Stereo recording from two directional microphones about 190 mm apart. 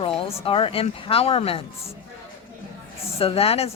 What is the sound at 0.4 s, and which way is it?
Speech, 30° left (ahead or behind).